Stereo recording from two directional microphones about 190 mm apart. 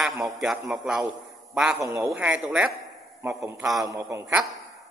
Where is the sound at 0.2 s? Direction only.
Centre (ahead or behind).